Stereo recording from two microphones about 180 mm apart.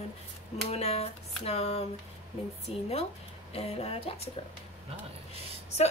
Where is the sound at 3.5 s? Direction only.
35° left (ahead or behind).